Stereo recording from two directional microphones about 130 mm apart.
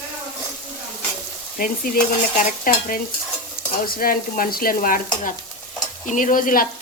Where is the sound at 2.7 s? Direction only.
90° left.